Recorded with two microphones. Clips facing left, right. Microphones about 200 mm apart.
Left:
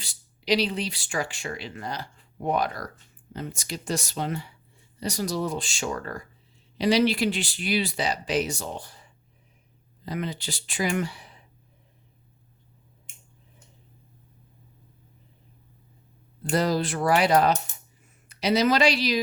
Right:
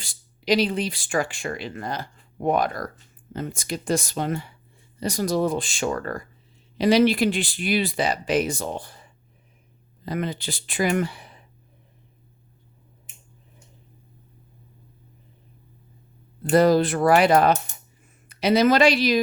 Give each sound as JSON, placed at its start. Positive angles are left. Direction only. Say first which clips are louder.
{"t": 0.0, "sound": "speech", "louder": "right 4 dB", "side_deg": -50}
{"t": 10.1, "sound": "speech", "louder": "right 3 dB", "side_deg": -55}
{"t": 16.4, "sound": "speech", "louder": "right 7 dB", "side_deg": -55}